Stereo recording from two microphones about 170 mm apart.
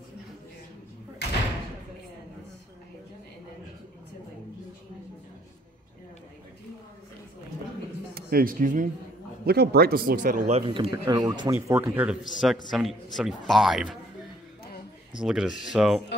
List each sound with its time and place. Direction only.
1.2 s slam: 85° left
8.1 s speech: 60° right (ahead or behind)
9.5 s speech: 65° right (ahead or behind); by 10.5 s 50° right (ahead or behind)
10.5 s speech: 35° right (ahead or behind)
11.1 s a man's voice: 25° right (ahead or behind); by 13.9 s centre (ahead or behind)
15.2 s a man's voice: 5° right (ahead or behind)